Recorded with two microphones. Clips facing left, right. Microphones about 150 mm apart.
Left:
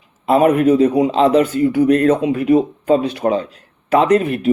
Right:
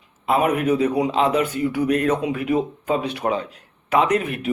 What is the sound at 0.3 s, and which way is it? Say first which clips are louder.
Speech: left 7 dB; 40° left (ahead or behind).